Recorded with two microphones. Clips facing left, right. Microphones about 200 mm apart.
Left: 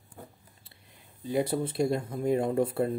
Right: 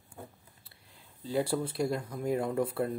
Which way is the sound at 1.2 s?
20° left (ahead or behind).